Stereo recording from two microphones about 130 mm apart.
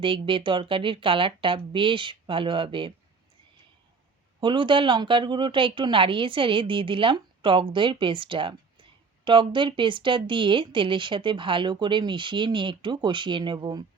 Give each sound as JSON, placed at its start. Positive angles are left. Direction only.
{"t": 0.0, "sound": "speech", "side_deg": -40}
{"t": 4.4, "sound": "speech", "side_deg": -40}